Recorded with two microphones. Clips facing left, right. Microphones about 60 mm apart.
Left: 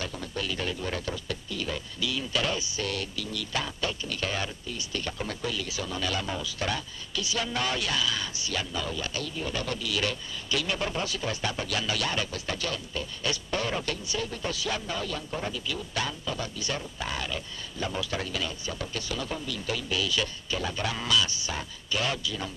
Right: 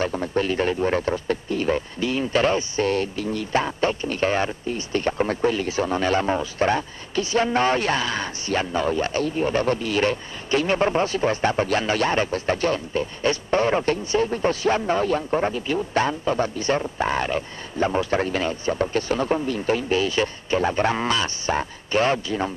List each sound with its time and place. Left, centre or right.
0.0 s speech: right